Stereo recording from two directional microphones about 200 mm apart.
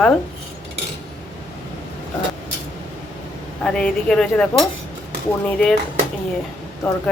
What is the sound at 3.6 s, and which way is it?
Speech, 5° left (ahead or behind).